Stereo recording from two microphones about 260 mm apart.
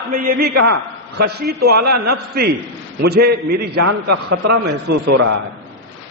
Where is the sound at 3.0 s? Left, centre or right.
Right.